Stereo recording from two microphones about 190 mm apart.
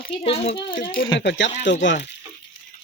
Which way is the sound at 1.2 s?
70° left (ahead or behind).